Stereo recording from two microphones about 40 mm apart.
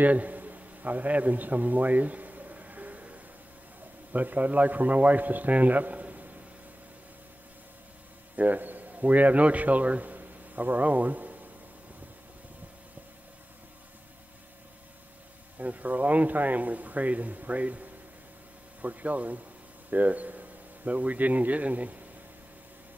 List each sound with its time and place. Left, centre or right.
0.0 s a sound: right
4.1 s a man's voice: right
8.4 s a man's voice: right
15.5 s a man's voice: right